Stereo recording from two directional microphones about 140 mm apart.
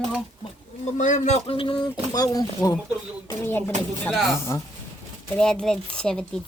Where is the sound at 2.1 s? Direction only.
25° left (ahead or behind).